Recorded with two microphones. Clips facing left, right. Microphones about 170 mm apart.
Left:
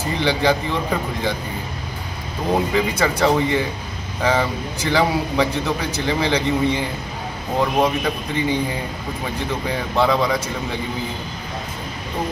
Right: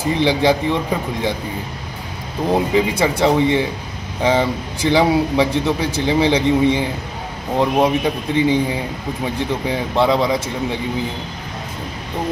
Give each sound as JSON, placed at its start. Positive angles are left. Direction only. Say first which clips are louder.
{"t": 0.2, "sound": "speech", "louder": "right 3 dB", "side_deg": -15}
{"t": 2.5, "sound": "speech", "louder": "right 3 dB", "side_deg": -20}
{"t": 9.7, "sound": "speech", "louder": "right 2 dB", "side_deg": -20}